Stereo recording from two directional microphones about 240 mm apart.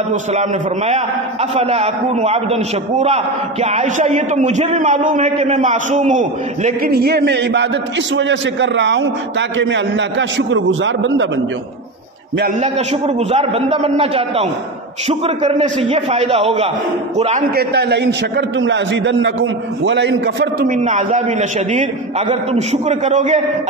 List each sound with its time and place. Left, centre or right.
0.1 s a man's voice: right
12.6 s a man's voice: right
17.6 s a man's voice: right